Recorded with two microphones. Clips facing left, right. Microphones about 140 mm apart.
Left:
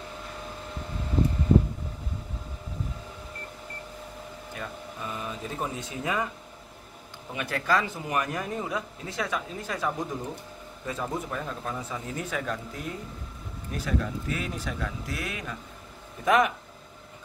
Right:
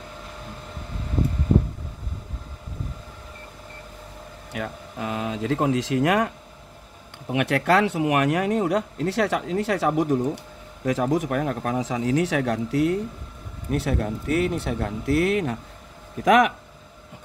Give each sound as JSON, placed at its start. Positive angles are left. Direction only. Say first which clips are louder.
{"t": 4.5, "sound": "speech", "louder": "right 8 dB", "side_deg": -85}
{"t": 7.3, "sound": "speech", "louder": "right 7 dB", "side_deg": -70}
{"t": 10.9, "sound": "speech", "louder": "right 10 dB", "side_deg": -90}
{"t": 16.3, "sound": "speech", "louder": "right 5 dB", "side_deg": -90}